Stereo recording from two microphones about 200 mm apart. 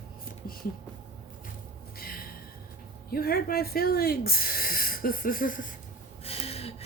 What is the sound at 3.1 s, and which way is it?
Speech, 50° left (ahead or behind).